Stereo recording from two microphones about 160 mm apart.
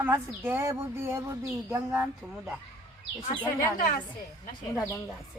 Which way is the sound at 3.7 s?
60° left (ahead or behind).